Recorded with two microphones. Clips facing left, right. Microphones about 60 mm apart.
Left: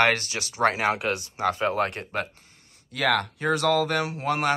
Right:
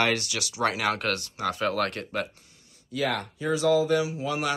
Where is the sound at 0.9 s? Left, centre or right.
Centre.